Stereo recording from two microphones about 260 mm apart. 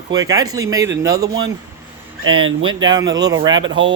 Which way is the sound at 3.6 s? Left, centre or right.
Right.